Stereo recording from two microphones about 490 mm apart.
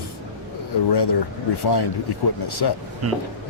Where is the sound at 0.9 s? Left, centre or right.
Left.